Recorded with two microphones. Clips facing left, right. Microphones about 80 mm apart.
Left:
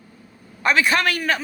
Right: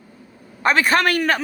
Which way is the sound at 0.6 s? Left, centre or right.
Right.